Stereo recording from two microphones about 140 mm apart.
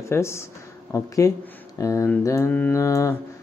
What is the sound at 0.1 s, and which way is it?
Speech, 20° left (ahead or behind).